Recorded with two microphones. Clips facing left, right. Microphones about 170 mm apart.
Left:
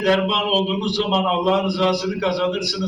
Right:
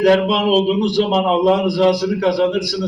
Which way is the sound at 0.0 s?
50° right (ahead or behind).